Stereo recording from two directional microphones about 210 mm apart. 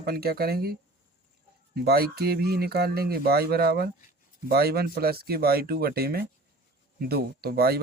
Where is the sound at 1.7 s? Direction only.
50° right (ahead or behind).